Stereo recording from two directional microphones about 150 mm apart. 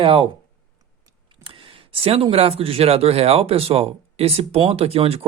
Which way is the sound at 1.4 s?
35° right (ahead or behind).